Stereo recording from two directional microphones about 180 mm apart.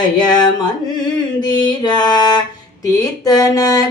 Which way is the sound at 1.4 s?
25° left (ahead or behind).